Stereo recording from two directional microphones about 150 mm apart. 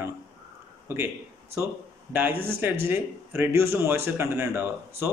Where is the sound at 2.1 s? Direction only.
10° right (ahead or behind).